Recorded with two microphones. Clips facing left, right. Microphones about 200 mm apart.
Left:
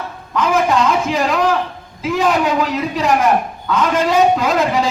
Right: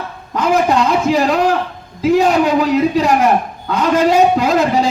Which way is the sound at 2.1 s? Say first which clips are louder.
Right 3 dB; 35° right (ahead or behind).